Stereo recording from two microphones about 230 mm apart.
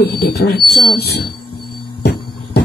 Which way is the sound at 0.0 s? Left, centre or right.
Left.